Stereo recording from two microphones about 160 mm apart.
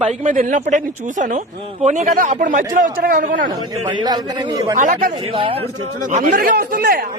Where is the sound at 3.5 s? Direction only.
30° right (ahead or behind).